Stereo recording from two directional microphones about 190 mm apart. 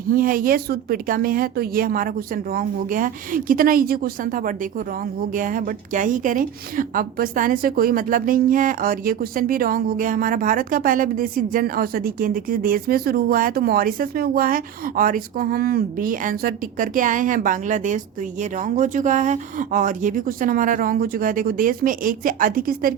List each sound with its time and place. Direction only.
0.1 s speech: 50° right (ahead or behind)